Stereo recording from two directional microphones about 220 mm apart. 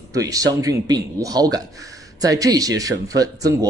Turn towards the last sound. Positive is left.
turn(degrees=-15)  # may be behind; listen again after turning